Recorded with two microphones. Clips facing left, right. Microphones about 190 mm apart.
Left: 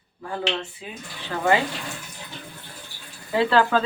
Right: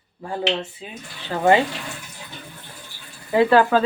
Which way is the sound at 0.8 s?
25° right (ahead or behind).